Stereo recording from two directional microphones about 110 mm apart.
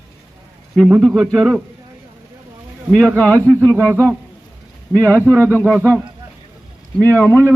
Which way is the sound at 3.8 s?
25° right (ahead or behind).